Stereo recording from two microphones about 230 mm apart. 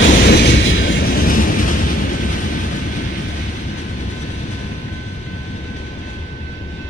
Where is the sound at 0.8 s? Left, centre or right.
Left.